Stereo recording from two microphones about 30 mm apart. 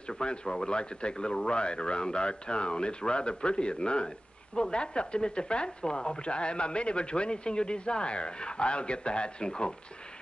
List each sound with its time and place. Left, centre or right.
0.1 s speech: left